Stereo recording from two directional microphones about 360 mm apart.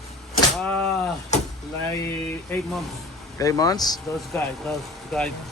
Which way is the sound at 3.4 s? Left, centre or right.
Centre.